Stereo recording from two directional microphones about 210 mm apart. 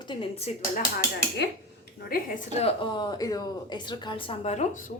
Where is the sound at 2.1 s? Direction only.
45° left (ahead or behind).